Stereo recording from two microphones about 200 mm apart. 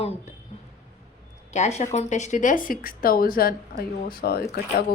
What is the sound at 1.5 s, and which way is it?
A woman's voice, 35° left (ahead or behind).